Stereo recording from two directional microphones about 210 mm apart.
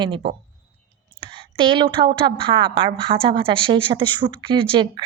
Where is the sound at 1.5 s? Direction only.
25° right (ahead or behind).